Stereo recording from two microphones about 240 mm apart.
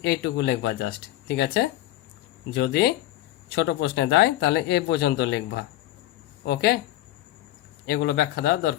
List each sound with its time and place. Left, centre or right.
0.0 s speech: left
7.9 s speech: left